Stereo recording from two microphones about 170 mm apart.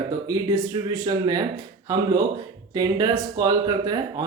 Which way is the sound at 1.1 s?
20° right (ahead or behind).